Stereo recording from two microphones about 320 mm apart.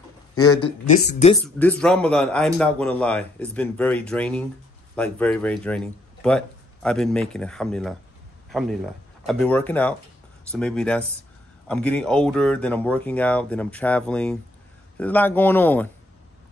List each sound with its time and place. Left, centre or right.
0.3 s a sound: left
0.6 s speech: centre
1.6 s speech: centre